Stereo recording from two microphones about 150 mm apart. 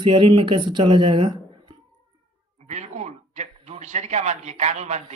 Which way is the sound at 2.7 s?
50° right (ahead or behind).